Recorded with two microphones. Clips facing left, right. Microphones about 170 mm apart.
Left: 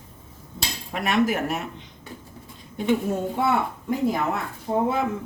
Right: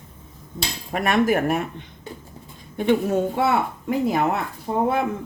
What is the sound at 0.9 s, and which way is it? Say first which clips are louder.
Speech: right 3 dB; 50° right (ahead or behind).